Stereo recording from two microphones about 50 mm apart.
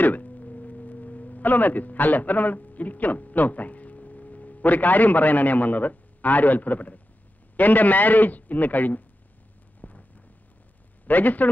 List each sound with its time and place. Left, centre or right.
0.0 s a man's voice: left
9.8 s a sound: left
11.1 s a man's voice: left